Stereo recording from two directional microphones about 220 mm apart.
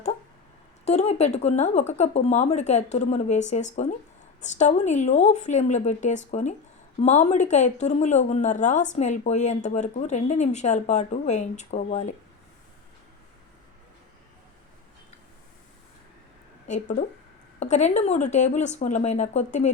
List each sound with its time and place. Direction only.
0.9 s speech: 30° left (ahead or behind)
16.6 s speech: 35° left (ahead or behind)